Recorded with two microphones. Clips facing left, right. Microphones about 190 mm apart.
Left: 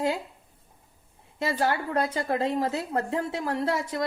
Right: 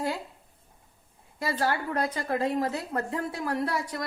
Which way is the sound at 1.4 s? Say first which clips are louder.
Left 2 dB; 25° left (ahead or behind).